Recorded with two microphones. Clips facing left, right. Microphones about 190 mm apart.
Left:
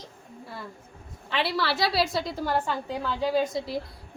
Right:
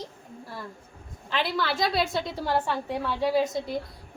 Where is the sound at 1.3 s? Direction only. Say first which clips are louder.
Left 1 dB; 5° left (ahead or behind).